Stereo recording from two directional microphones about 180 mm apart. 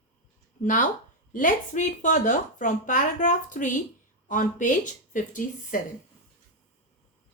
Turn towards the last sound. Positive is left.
turn(degrees=45)  # may be behind; listen again after turning